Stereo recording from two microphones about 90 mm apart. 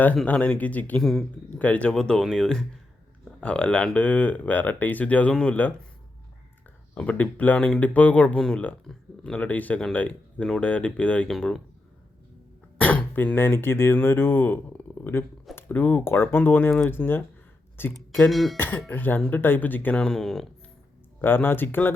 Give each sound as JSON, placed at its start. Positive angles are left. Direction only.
{"t": 0.3, "sound": "speech", "side_deg": 15}
{"t": 6.9, "sound": "speech", "side_deg": 15}
{"t": 12.8, "sound": "speech", "side_deg": 15}
{"t": 18.3, "sound": "speech", "side_deg": 0}
{"t": 18.5, "sound": "speech", "side_deg": 20}
{"t": 20.1, "sound": "speech", "side_deg": 5}
{"t": 21.2, "sound": "speech", "side_deg": 25}